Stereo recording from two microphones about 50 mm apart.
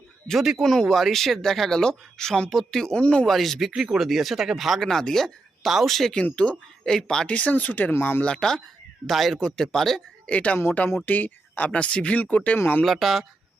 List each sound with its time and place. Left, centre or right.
0.3 s speech: centre
2.8 s speech: centre
3.2 s speech: centre
6.3 s speech: left
6.8 s speech: centre
7.3 s speech: left
7.9 s speech: left
8.2 s speech: centre
9.0 s speech: centre
10.2 s speech: left
10.8 s speech: left
12.8 s speech: centre